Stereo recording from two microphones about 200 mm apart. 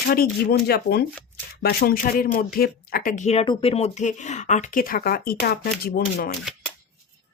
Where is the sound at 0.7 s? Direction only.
55° left (ahead or behind).